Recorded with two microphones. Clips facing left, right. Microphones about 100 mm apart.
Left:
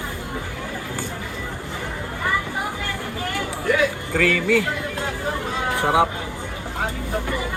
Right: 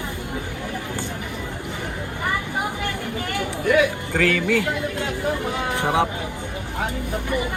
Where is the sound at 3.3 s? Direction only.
20° right (ahead or behind).